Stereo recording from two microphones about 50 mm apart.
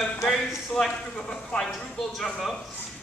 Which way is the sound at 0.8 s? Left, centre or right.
Centre.